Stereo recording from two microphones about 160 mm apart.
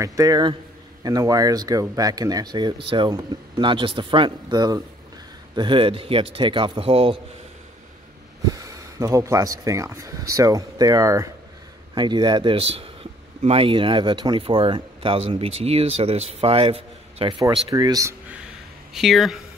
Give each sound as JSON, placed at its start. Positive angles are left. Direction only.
{"t": 0.0, "sound": "speech", "side_deg": -20}
{"t": 8.5, "sound": "speech", "side_deg": -20}
{"t": 18.9, "sound": "speech", "side_deg": 0}